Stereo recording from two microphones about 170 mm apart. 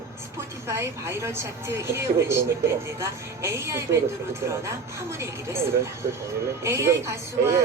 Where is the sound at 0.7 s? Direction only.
15° right (ahead or behind).